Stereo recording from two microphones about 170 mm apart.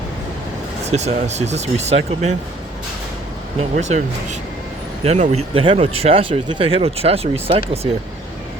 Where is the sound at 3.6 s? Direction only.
45° right (ahead or behind).